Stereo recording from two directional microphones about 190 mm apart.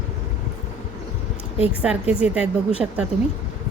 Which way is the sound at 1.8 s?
5° right (ahead or behind).